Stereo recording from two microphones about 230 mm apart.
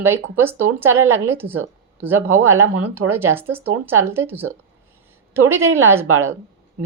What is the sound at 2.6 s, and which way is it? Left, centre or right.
Speech, right.